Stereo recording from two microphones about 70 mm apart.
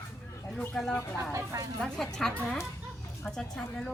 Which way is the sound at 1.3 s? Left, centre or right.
Right.